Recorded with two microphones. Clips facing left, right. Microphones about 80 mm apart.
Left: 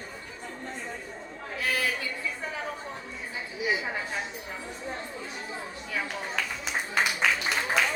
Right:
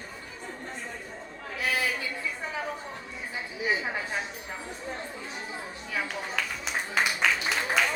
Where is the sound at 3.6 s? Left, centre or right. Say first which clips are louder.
Even; right.